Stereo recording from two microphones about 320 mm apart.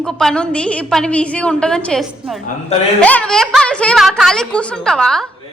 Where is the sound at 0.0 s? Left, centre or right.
Centre.